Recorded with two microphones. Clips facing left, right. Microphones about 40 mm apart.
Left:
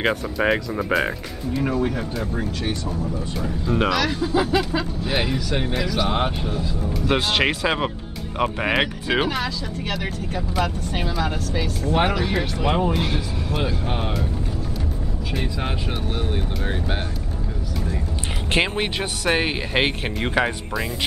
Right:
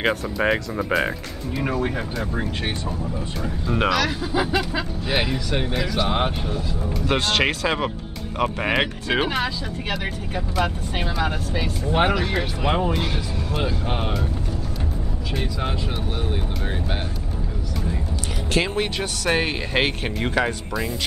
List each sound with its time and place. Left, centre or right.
0.0 s speech: centre
1.6 s speech: centre
3.3 s speech: centre
16.2 s speech: centre
18.5 s speech: left
18.9 s speech: centre